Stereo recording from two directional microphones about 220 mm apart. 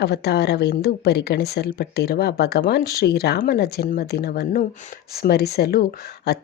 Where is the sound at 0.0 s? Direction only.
45° left (ahead or behind).